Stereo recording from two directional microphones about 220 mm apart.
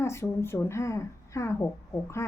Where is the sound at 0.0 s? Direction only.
10° left (ahead or behind).